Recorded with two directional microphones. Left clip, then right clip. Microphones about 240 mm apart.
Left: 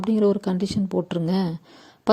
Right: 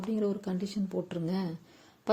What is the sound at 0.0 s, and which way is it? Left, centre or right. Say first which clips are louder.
A woman's voice: left 11 dB; left.